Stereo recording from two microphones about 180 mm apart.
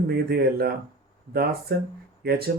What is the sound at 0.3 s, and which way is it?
Speech, 60° right (ahead or behind).